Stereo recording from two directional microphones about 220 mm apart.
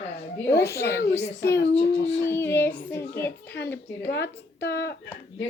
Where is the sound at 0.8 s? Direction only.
50° left (ahead or behind).